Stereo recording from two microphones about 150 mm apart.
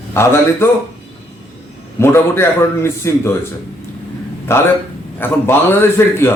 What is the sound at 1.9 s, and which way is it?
A man's voice, 15° left (ahead or behind).